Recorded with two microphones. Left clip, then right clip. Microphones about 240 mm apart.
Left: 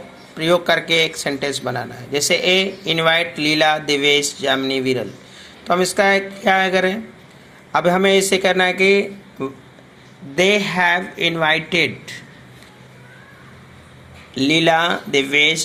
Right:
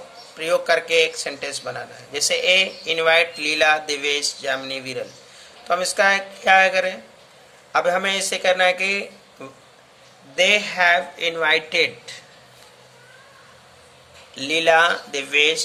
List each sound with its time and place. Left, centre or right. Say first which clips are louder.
0.3 s a man's voice: left 3 dB; centre
10.3 s a man's voice: left 2 dB; centre
14.3 s a man's voice: left 1 dB; centre